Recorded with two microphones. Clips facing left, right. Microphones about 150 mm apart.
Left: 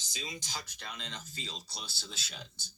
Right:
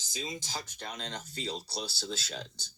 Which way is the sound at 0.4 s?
50° right (ahead or behind).